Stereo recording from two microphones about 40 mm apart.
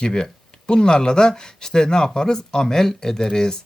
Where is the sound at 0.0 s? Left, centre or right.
Centre.